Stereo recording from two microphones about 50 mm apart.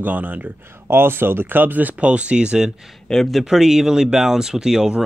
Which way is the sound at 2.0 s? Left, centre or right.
Right.